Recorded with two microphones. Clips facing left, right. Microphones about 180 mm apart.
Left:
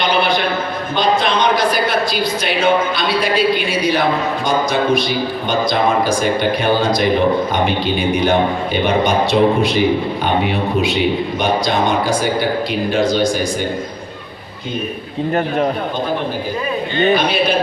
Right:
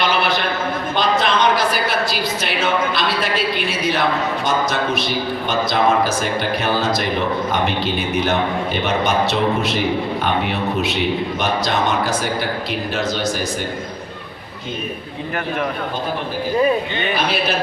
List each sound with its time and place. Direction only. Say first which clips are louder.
0.2 s a sound: left 3 dB; 5° right (ahead or behind)
1.7 s a woman's voice: left 3 dB; 5° right (ahead or behind)
15.4 s a man's voice: left 5 dB; 35° left (ahead or behind)
17.2 s a man's voice: left 4 dB; 5° right (ahead or behind)